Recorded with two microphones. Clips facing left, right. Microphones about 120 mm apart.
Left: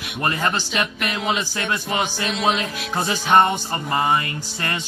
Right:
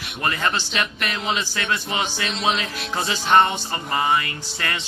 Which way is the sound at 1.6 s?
40° left (ahead or behind).